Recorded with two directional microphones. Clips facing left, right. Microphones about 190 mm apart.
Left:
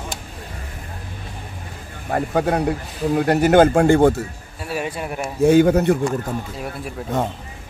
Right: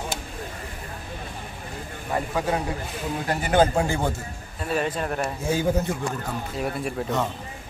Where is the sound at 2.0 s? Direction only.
55° left (ahead or behind).